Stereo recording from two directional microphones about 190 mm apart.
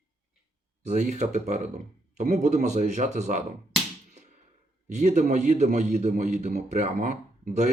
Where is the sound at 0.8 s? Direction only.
35° right (ahead or behind).